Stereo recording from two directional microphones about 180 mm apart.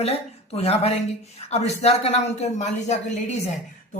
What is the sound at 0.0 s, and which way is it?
Speech, 35° left (ahead or behind).